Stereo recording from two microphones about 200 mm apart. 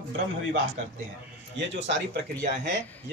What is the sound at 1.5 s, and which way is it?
Speech, 65° right (ahead or behind).